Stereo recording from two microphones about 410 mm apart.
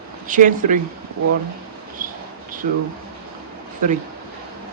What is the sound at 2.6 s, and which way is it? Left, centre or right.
Speech, centre.